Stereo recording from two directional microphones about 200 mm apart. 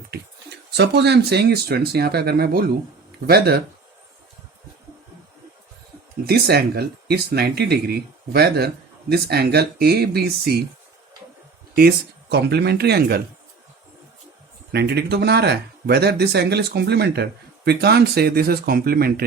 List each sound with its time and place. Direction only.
0.8 s speech: 55° right (ahead or behind)
6.2 s speech: 50° right (ahead or behind)
11.7 s speech: 50° right (ahead or behind)
14.7 s speech: 55° right (ahead or behind)